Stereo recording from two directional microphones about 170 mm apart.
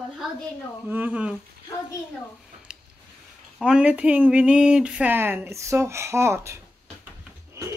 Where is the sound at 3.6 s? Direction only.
5° right (ahead or behind).